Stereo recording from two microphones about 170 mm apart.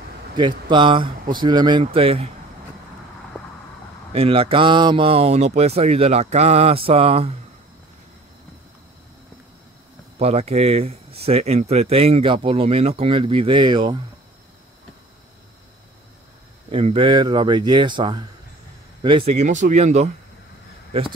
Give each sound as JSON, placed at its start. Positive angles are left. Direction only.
{"t": 0.4, "sound": "speech", "side_deg": -30}
{"t": 4.1, "sound": "speech", "side_deg": -35}
{"t": 10.1, "sound": "speech", "side_deg": -40}
{"t": 16.7, "sound": "speech", "side_deg": -35}